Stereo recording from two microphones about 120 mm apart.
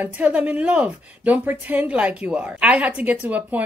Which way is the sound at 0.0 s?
15° right (ahead or behind).